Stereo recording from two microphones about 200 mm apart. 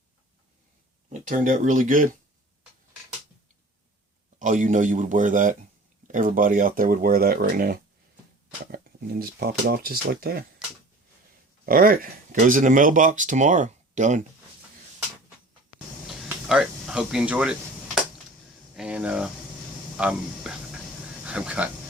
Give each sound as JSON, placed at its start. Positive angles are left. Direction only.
{"t": 1.1, "sound": "speech", "side_deg": -40}
{"t": 4.4, "sound": "speech", "side_deg": -40}
{"t": 11.6, "sound": "speech", "side_deg": -45}
{"t": 16.0, "sound": "a sound", "side_deg": 0}
{"t": 18.8, "sound": "speech", "side_deg": -5}